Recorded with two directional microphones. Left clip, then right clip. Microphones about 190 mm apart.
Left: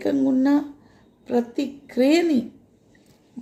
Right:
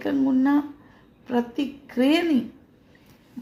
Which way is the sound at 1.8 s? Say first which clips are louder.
Left 3 dB; 25° left (ahead or behind).